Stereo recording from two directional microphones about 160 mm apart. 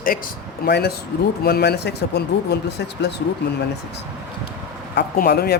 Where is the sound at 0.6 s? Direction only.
85° left.